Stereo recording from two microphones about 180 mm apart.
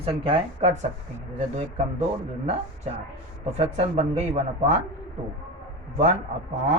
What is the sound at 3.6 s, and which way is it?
Speech, 35° right (ahead or behind).